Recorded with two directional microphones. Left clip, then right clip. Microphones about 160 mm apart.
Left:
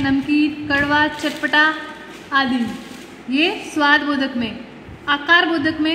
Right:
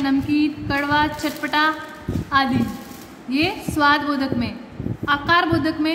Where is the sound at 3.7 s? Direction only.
20° left (ahead or behind).